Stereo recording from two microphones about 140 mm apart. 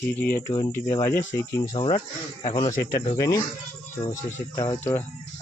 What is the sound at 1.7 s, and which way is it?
Speech, 35° left (ahead or behind).